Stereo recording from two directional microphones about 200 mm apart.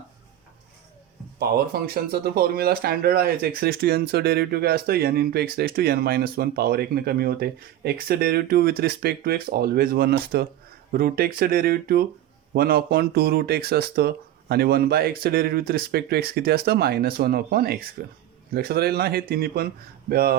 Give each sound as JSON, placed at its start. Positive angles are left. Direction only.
{"t": 1.4, "sound": "speech", "side_deg": -50}